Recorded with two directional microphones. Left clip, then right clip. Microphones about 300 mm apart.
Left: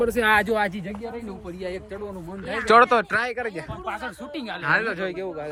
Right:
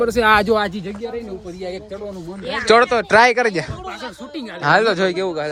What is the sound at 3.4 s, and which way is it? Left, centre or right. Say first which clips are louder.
Speech: right 11 dB; right.